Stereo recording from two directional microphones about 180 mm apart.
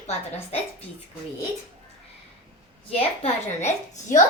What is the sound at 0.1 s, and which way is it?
Speech, 35° left (ahead or behind).